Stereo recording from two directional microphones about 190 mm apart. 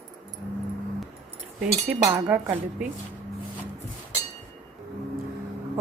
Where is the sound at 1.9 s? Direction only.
15° right (ahead or behind).